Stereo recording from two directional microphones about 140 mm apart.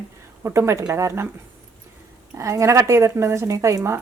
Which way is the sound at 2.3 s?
20° right (ahead or behind).